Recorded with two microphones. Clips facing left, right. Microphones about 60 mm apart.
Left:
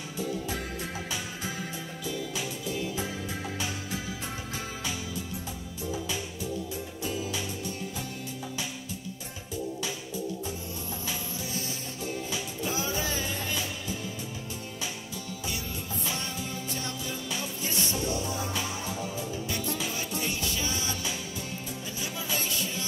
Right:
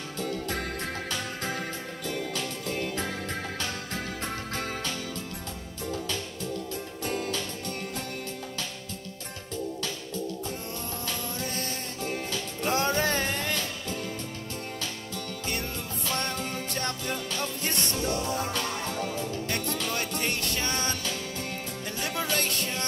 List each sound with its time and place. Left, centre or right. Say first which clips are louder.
0.2 s music: right 1 dB; right
11.4 s music: right 3 dB; right
16.2 s music: right 4 dB; right
22.0 s music: right 5 dB; right